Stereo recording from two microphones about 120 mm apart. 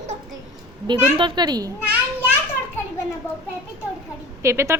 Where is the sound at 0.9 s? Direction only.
40° right (ahead or behind).